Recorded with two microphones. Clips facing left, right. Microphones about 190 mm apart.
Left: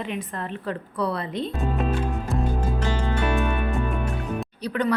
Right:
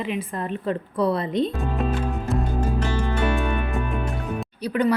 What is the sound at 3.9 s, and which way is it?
Music, 5° right (ahead or behind).